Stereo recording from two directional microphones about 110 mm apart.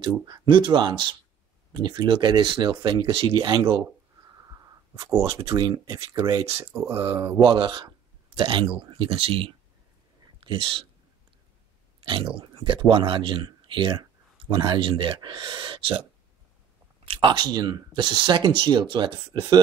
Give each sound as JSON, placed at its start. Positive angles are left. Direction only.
{"t": 0.2, "sound": "speech", "side_deg": -45}
{"t": 4.9, "sound": "speech", "side_deg": -30}
{"t": 7.5, "sound": "speech", "side_deg": -45}
{"t": 12.0, "sound": "speech", "side_deg": -50}